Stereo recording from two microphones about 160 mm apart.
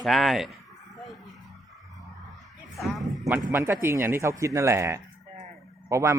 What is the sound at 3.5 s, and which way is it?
Speech, 15° right (ahead or behind).